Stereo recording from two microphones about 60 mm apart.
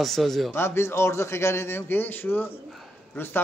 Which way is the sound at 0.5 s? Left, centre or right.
Left.